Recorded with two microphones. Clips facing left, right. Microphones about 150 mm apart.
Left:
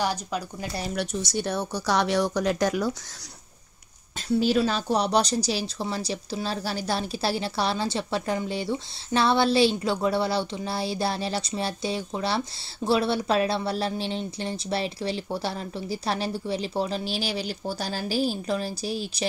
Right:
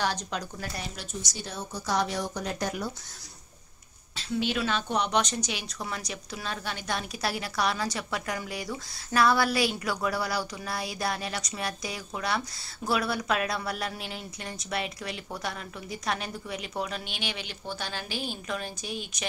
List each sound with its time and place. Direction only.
0.0 s speech: 10° left (ahead or behind)
0.9 s speech: 60° left (ahead or behind); by 2.9 s 90° left
4.3 s a woman's voice: 35° left (ahead or behind)